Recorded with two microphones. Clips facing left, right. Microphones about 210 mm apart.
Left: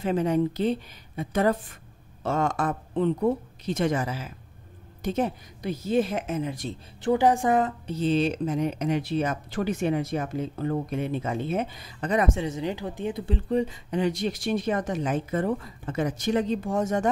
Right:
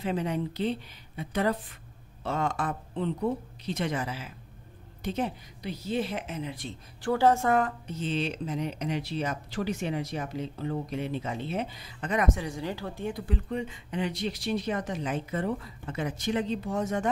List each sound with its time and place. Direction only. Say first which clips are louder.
0.0 s speech: left 6 dB; 45° left (ahead or behind)
7.0 s a woman's voice: left 2 dB; 15° left (ahead or behind)
7.8 s speech: left 7 dB; 35° left (ahead or behind)
12.1 s speech: left 3 dB; 30° left (ahead or behind)